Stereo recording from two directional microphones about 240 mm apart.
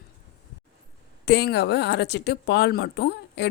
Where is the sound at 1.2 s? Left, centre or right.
Left.